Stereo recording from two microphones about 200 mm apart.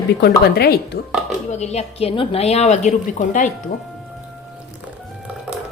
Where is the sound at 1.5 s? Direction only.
35° left (ahead or behind).